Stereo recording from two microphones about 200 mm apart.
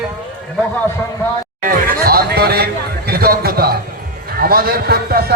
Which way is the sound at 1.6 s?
50° right (ahead or behind).